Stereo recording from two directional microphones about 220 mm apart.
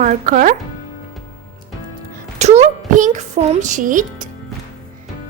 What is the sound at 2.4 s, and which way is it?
A child's voice, 30° right (ahead or behind).